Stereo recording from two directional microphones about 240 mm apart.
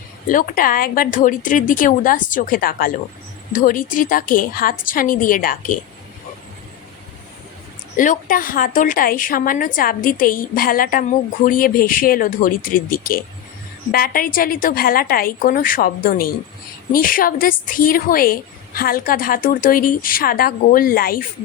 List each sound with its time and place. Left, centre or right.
0.3 s a woman's voice: left
7.9 s a woman's voice: left